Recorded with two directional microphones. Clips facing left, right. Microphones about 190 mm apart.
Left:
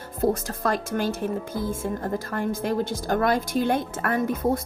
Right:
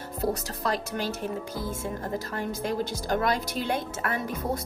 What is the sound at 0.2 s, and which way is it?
Speech, 50° left (ahead or behind).